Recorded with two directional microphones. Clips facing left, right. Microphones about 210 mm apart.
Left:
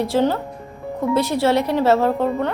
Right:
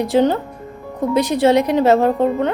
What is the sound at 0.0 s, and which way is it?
Speech, 15° right (ahead or behind).